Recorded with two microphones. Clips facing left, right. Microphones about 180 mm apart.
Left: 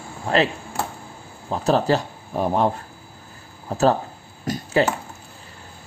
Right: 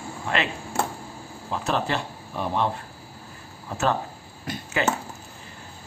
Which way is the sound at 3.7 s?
35° left (ahead or behind).